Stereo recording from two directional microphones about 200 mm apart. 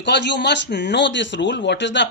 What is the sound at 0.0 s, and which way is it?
Speech, 60° left (ahead or behind).